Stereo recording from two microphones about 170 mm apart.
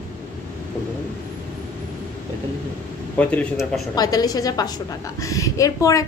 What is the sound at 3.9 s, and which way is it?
A woman's voice, 25° left (ahead or behind).